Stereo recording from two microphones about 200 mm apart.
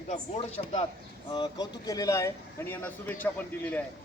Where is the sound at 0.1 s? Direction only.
30° left (ahead or behind).